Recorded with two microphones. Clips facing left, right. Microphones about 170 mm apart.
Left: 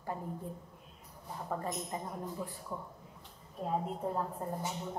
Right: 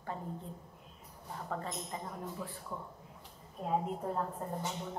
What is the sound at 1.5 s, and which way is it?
Speech, 15° left (ahead or behind).